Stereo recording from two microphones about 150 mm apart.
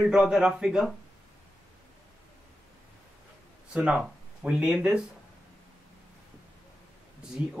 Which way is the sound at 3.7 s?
10° right (ahead or behind).